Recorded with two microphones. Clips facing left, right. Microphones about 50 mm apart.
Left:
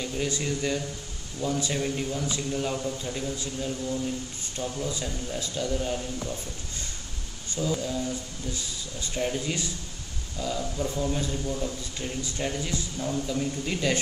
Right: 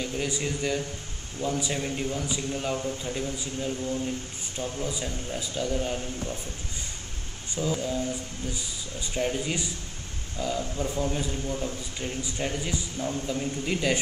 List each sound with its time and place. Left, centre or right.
0.0 s a man's voice: centre
7.8 s a man's voice: centre
9.1 s a man's voice: centre